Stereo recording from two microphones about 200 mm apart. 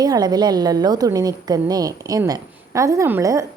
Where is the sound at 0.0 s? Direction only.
20° right (ahead or behind).